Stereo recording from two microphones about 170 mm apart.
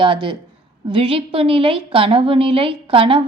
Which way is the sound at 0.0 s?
30° right (ahead or behind).